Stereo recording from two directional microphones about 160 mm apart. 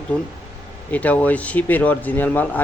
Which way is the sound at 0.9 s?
10° left (ahead or behind).